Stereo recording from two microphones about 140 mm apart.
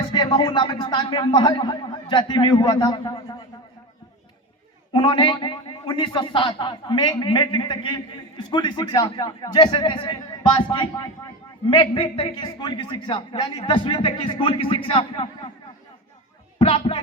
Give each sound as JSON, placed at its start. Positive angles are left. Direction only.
{"t": 0.0, "sound": "a man's voice", "side_deg": 35}
{"t": 4.9, "sound": "a man's voice", "side_deg": 40}
{"t": 16.6, "sound": "a man's voice", "side_deg": 40}